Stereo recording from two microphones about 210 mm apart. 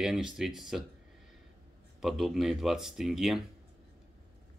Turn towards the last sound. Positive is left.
turn(degrees=0)  # may be behind; listen again after turning